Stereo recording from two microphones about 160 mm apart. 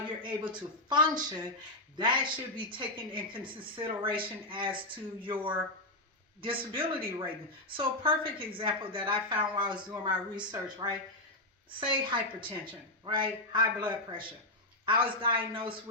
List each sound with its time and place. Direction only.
0.2 s a woman's voice: 30° right (ahead or behind)
6.4 s a woman's voice: 35° right (ahead or behind)